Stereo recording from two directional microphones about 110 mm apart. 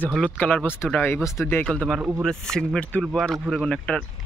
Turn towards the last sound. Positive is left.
turn(degrees=5)  # may be behind; listen again after turning